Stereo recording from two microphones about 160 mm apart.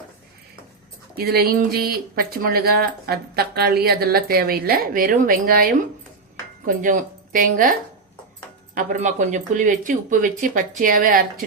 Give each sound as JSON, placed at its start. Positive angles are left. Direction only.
{"t": 1.1, "sound": "speech", "side_deg": -75}
{"t": 8.7, "sound": "speech", "side_deg": -55}